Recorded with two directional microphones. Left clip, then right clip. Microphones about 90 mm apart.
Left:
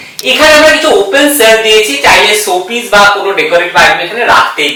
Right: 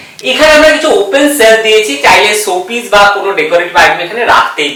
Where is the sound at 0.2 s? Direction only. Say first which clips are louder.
Left 1 dB; 15° right (ahead or behind).